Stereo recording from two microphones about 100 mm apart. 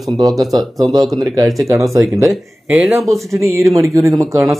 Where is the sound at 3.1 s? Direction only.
30° right (ahead or behind).